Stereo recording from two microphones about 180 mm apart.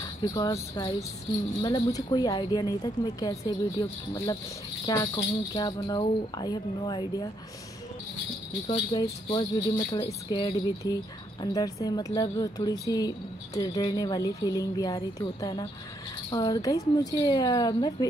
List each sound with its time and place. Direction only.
0.0 s speech: 20° left (ahead or behind)
8.6 s speech: 25° left (ahead or behind)